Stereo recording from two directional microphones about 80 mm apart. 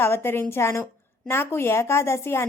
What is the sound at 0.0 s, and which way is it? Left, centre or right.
A woman's voice, left.